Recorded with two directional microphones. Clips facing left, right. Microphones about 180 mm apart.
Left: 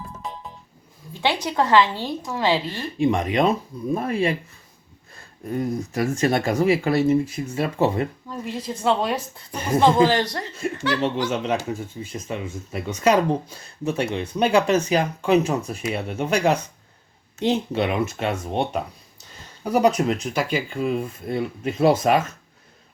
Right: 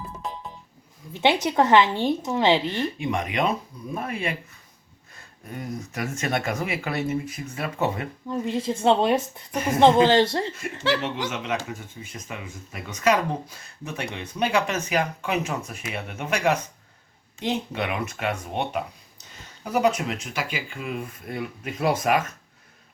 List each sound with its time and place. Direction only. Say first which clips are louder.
0.2 s music: right 1 dB; centre (ahead or behind)
1.1 s a woman's voice: right 2 dB; 20° right (ahead or behind)
3.0 s speech: left 9 dB; 35° left (ahead or behind)
5.5 s speech: left 8 dB; 30° left (ahead or behind)
8.3 s a woman's voice: right 4 dB; 25° right (ahead or behind)
11.0 s speech: left 6 dB; 35° left (ahead or behind)